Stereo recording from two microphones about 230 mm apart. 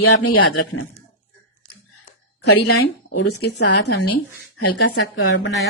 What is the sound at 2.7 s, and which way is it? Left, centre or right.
Speech, left.